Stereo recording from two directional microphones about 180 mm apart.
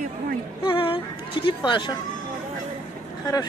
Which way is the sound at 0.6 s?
30° left (ahead or behind).